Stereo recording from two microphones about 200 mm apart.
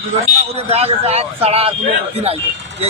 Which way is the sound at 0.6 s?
30° right (ahead or behind).